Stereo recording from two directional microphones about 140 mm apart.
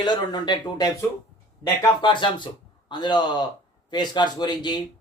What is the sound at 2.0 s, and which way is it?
Speech, 35° left (ahead or behind).